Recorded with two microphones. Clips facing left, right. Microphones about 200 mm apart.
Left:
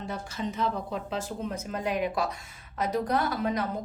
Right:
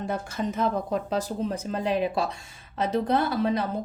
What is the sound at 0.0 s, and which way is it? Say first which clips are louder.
A woman's voice: right 4 dB; 50° right (ahead or behind).